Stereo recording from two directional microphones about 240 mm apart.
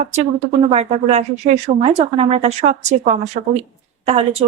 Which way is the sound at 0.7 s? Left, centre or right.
Right.